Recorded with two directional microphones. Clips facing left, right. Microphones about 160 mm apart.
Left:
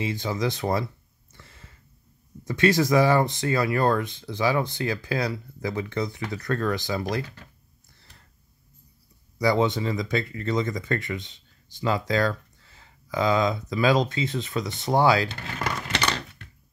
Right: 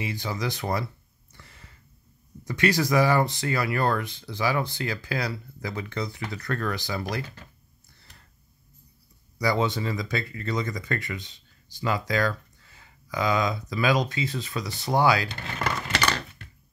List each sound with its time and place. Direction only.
0.0 s speech: 25° left (ahead or behind)
1.3 s a sound: 20° left (ahead or behind)
2.4 s speech: 25° left (ahead or behind)
9.4 s speech: 20° left (ahead or behind)